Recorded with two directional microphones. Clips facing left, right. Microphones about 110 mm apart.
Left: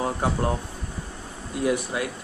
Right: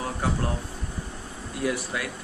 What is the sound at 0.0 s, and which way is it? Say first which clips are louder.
Speech: left 4 dB; 25° left (ahead or behind).